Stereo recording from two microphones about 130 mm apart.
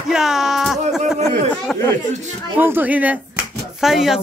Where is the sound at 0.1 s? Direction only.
5° right (ahead or behind).